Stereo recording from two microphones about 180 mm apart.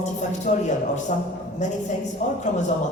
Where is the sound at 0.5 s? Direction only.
45° left (ahead or behind).